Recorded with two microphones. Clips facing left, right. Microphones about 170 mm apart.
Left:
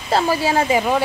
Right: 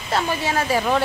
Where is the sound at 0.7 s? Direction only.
15° left (ahead or behind).